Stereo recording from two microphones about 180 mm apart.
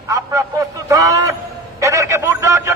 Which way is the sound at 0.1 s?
20° right (ahead or behind).